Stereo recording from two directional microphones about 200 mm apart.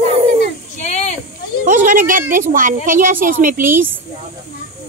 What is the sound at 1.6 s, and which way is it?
A woman's voice, 40° right (ahead or behind).